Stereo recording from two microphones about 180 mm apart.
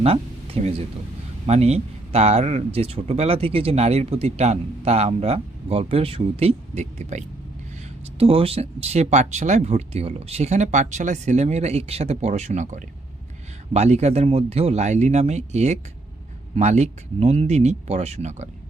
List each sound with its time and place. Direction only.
0.0 s speech: 35° right (ahead or behind)